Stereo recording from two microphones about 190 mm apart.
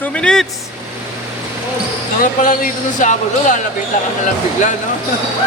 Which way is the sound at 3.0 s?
40° left (ahead or behind).